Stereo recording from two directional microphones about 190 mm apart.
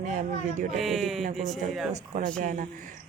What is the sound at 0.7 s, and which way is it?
Speech, centre (ahead or behind).